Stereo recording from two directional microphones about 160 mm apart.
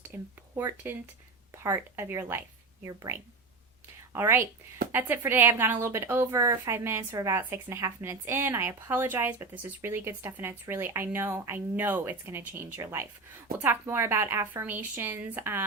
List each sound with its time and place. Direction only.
0.1 s a woman's voice: 15° right (ahead or behind)